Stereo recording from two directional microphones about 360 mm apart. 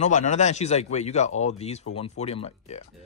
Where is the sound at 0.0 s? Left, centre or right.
Centre.